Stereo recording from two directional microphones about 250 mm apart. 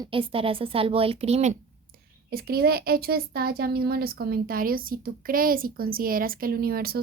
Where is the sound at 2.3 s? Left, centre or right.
Right.